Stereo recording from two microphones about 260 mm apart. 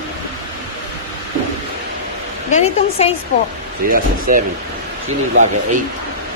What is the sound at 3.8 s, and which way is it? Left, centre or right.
Speech, right.